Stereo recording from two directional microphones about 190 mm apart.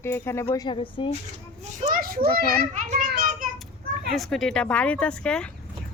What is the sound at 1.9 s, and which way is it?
Speech, 50° right (ahead or behind).